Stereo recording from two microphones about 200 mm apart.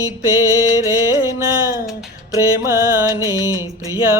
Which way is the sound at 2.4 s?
15° right (ahead or behind).